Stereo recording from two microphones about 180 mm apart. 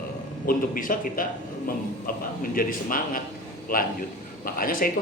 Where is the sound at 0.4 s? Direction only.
50° left (ahead or behind).